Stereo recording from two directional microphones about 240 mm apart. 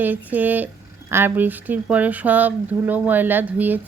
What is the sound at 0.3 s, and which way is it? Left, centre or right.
A woman's voice, centre.